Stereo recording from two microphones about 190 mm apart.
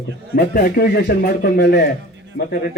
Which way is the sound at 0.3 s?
50° left (ahead or behind).